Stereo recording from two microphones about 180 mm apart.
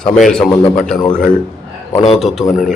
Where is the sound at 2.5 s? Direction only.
45° left (ahead or behind).